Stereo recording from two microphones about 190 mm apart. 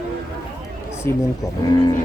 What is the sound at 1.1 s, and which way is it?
Speech, 10° left (ahead or behind).